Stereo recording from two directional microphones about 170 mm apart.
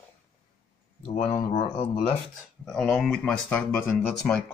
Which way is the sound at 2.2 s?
Centre (ahead or behind).